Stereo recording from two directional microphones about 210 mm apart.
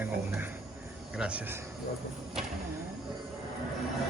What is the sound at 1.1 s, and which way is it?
Speech, 5° right (ahead or behind).